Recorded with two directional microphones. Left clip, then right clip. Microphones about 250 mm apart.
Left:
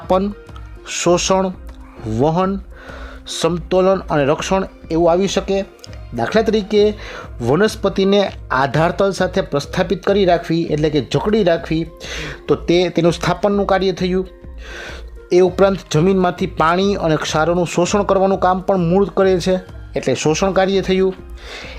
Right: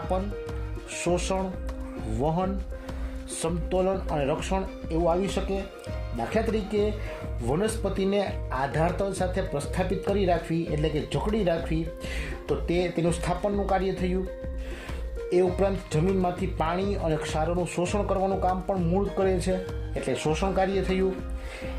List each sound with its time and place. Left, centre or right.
0.9 s speech: left
15.3 s speech: left